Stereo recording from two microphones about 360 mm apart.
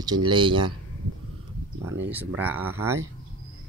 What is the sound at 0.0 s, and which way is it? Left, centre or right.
Speech, centre.